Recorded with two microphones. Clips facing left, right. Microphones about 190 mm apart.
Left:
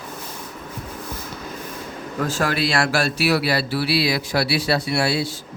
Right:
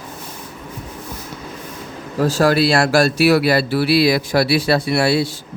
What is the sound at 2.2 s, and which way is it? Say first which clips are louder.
Speech: right 7 dB; 35° right (ahead or behind).